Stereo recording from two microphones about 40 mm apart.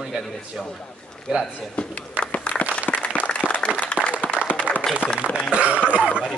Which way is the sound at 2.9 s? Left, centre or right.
Left.